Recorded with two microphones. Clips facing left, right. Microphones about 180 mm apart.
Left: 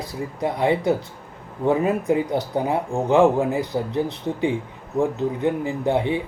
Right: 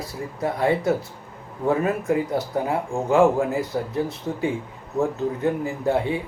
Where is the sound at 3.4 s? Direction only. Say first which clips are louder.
Left 1 dB; 15° left (ahead or behind).